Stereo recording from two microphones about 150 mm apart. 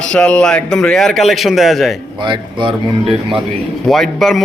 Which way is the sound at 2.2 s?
30° right (ahead or behind).